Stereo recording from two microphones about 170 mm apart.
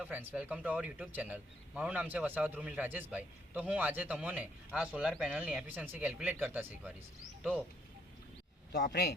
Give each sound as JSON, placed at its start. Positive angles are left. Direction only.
{"t": 0.0, "sound": "a man's voice", "side_deg": -10}
{"t": 8.9, "sound": "speech", "side_deg": 70}